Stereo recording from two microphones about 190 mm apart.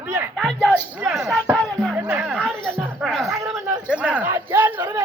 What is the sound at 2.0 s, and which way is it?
Music, 10° right (ahead or behind).